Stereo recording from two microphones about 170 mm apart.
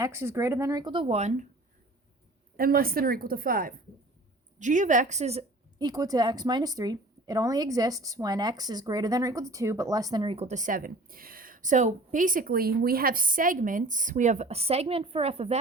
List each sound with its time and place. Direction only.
0.0 s speech: 15° right (ahead or behind); by 1.5 s 45° right (ahead or behind)
2.6 s a woman's voice: 60° right (ahead or behind)
4.6 s a woman's voice: 45° right (ahead or behind)
5.8 s a woman's voice: 20° right (ahead or behind)